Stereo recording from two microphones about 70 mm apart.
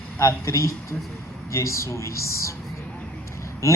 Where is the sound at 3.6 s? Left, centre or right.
Left.